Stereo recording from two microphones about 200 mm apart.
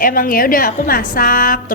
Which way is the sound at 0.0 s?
45° left (ahead or behind).